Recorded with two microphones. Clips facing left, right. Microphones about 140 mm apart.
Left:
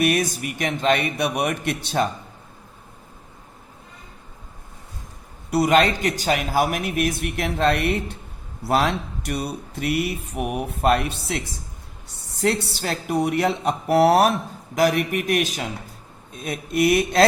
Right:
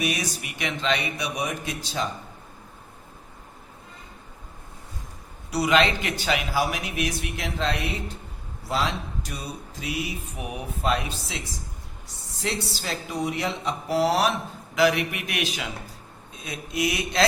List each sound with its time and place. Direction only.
0.0 s speech: 55° left (ahead or behind)
5.5 s a man's voice: 50° left (ahead or behind)